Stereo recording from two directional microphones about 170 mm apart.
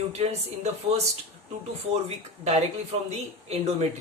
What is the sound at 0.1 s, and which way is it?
Speech, 40° right (ahead or behind).